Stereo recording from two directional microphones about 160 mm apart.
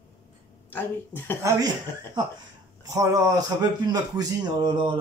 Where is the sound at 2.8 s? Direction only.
20° right (ahead or behind).